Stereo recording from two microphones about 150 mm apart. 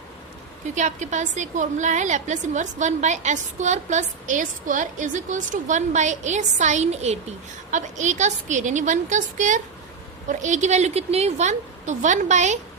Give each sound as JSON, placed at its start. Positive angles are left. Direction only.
{"t": 0.8, "sound": "a woman's voice", "side_deg": -50}